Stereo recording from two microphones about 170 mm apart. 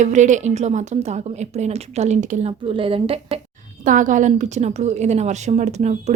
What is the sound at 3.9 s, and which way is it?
A woman's voice, 50° right (ahead or behind).